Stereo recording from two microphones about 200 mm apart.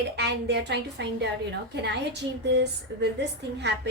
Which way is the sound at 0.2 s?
55° right (ahead or behind).